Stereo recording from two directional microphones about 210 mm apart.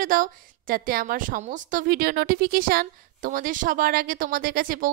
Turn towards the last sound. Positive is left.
turn(degrees=-40)  # may be behind; listen again after turning